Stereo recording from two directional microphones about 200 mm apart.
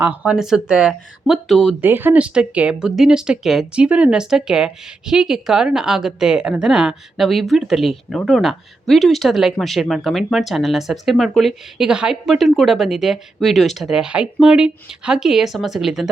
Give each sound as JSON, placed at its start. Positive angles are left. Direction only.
{"t": 0.0, "sound": "speech", "side_deg": -5}